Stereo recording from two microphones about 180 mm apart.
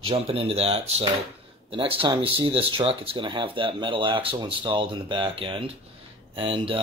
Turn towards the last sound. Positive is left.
turn(degrees=-30)  # may be behind; listen again after turning